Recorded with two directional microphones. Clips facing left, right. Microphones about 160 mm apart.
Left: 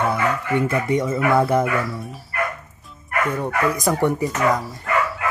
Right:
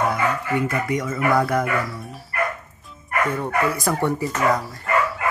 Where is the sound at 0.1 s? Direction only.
25° left (ahead or behind).